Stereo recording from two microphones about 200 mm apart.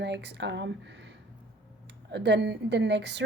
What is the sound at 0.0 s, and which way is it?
Speech, 60° right (ahead or behind).